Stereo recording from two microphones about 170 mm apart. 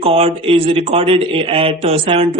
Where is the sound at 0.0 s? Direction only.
35° right (ahead or behind).